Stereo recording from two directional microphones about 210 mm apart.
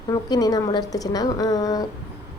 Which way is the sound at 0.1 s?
15° left (ahead or behind).